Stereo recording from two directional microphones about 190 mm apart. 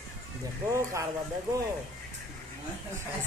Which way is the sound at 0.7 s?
15° right (ahead or behind).